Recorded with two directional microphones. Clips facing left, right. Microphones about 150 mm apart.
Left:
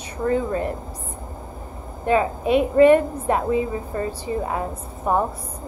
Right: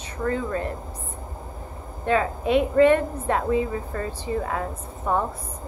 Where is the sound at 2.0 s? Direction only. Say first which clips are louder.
Left 3 dB; 15° left (ahead or behind).